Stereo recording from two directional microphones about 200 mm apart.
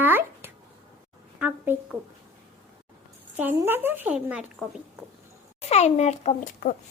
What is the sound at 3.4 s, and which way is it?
Speech, 10° right (ahead or behind).